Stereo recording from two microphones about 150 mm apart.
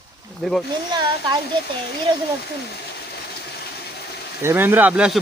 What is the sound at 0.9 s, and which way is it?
Speech, 30° right (ahead or behind).